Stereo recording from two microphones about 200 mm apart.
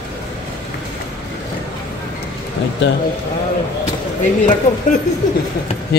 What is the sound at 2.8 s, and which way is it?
Speech, 60° left (ahead or behind).